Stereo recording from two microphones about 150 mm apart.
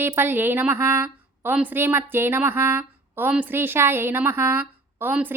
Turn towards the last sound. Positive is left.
turn(degrees=-10)  # may be behind; listen again after turning